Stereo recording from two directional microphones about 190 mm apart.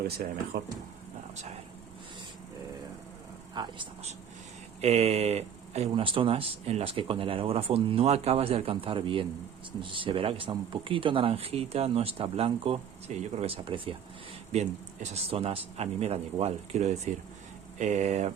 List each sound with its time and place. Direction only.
0.5 s speech: 45° right (ahead or behind)
3.5 s speech: 20° right (ahead or behind)
4.8 s speech: 35° right (ahead or behind)